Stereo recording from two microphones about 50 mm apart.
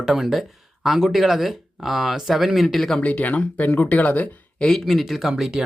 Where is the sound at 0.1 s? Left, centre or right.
Centre.